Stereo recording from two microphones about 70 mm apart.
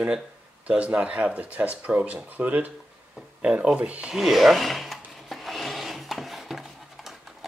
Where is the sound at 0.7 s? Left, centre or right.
Centre.